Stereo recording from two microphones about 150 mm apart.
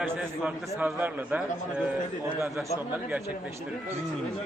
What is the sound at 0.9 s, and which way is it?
Speech, 10° right (ahead or behind).